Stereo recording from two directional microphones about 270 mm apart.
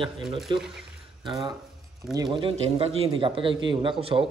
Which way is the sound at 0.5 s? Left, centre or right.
Centre.